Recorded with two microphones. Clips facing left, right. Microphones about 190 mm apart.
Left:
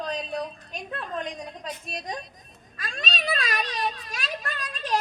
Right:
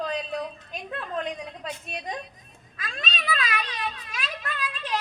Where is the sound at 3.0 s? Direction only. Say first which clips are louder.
Left 1 dB; 45° left (ahead or behind).